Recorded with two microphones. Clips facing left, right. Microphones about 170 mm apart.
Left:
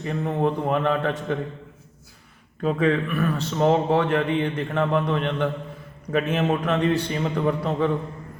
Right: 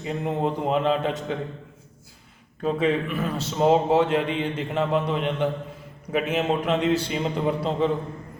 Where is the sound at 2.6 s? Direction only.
20° right (ahead or behind).